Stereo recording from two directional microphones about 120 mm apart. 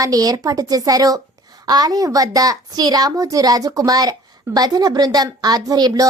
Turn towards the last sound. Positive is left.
turn(degrees=-35)  # may be behind; listen again after turning